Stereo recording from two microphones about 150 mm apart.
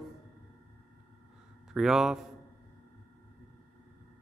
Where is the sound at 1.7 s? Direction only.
5° right (ahead or behind).